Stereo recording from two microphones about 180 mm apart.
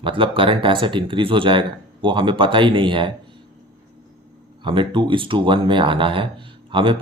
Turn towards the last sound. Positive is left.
turn(degrees=-30)  # may be behind; listen again after turning